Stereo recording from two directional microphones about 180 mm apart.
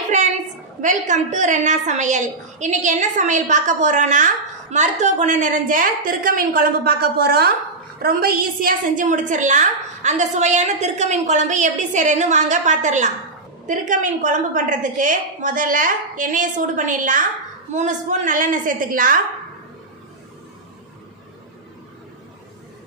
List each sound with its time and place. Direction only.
0.7 s a woman's voice: 45° right (ahead or behind)